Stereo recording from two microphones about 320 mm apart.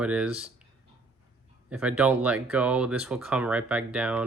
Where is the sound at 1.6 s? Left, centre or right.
Centre.